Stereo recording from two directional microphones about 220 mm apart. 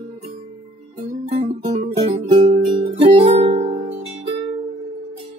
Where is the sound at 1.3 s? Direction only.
30° right (ahead or behind).